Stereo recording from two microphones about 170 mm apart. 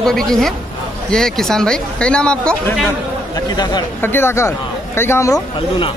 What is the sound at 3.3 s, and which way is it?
Speech, 25° left (ahead or behind).